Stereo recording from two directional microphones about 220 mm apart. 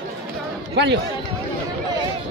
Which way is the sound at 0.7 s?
50° right (ahead or behind).